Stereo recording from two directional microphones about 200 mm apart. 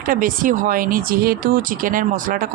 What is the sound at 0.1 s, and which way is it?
Speech, 45° right (ahead or behind).